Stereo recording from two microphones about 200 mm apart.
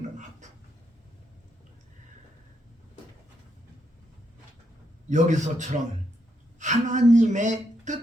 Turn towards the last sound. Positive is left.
turn(degrees=-40)  # may be behind; listen again after turning